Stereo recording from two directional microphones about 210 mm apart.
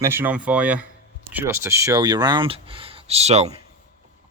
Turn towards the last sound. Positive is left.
turn(degrees=-30)  # may be behind; listen again after turning